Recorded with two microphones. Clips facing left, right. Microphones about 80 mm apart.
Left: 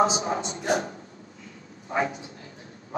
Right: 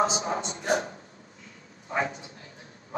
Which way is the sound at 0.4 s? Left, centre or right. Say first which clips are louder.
Left 2 dB; right.